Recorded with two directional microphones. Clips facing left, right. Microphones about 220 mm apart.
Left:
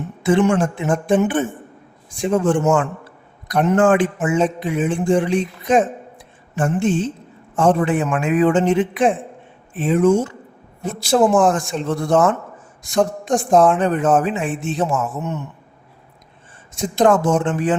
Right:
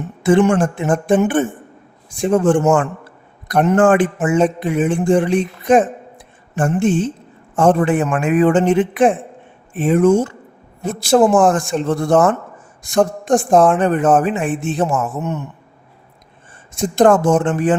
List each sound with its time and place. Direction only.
0.2 s speech: 50° right (ahead or behind)
16.9 s speech: 50° right (ahead or behind)